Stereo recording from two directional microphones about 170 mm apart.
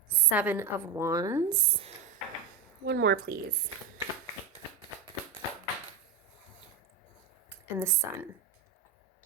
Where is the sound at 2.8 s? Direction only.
75° right (ahead or behind).